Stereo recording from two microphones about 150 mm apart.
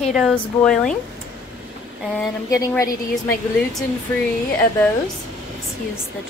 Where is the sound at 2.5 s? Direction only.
25° left (ahead or behind).